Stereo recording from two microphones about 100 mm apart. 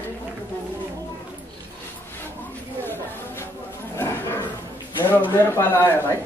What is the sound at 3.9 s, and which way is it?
Wild animals, 25° left (ahead or behind).